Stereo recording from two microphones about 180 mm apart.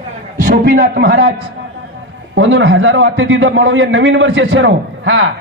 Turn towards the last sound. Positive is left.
turn(degrees=-90)